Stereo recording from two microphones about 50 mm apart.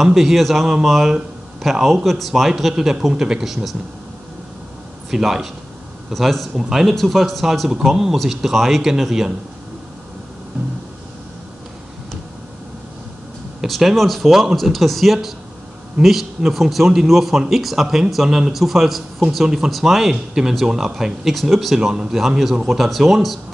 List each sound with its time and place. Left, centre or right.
0.0 s speech: centre
5.1 s speech: centre
13.6 s speech: centre
21.7 s speech: centre